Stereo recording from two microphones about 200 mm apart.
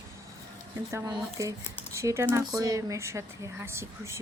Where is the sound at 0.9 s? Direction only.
15° right (ahead or behind).